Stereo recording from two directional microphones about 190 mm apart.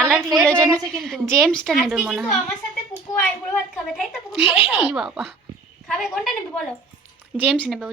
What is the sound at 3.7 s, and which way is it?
A woman's voice, centre (ahead or behind).